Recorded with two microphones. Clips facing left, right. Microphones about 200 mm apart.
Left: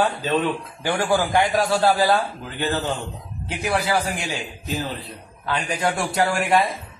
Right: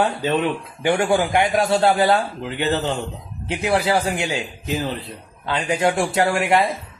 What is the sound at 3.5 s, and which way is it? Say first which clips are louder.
A man's voice: right 4 dB; 25° right (ahead or behind).